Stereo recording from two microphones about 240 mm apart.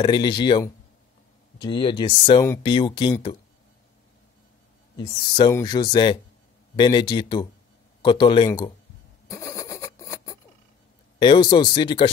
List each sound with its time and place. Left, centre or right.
0.0 s speech: centre
4.9 s speech: centre
9.3 s vehicle: centre
11.1 s speech: centre